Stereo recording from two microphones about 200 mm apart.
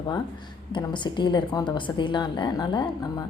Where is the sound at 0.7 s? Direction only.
25° left (ahead or behind).